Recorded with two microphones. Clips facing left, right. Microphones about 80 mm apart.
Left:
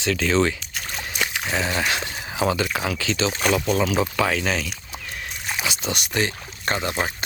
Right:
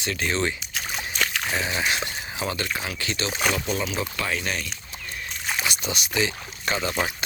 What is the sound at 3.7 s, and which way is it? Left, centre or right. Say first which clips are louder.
Speech: left 7 dB; left.